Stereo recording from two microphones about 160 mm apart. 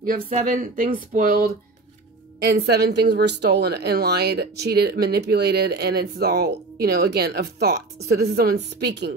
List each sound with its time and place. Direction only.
0.0 s speech: 55° right (ahead or behind)
2.4 s a woman's voice: 90° right